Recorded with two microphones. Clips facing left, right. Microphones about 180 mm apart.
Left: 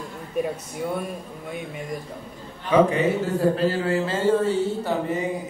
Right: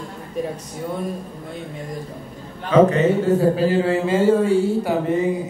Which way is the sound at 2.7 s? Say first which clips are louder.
Right 4 dB; 10° left (ahead or behind).